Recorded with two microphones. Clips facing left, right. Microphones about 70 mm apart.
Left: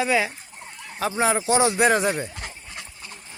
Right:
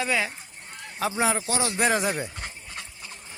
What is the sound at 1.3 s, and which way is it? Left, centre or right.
Speech, left.